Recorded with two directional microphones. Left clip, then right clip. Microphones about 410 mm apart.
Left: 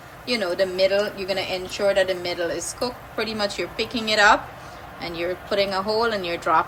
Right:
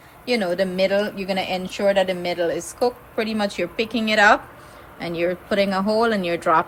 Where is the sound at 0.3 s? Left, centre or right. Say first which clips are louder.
Right 1 dB; centre.